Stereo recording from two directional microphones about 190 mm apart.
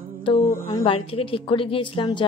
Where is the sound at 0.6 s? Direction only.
25° left (ahead or behind).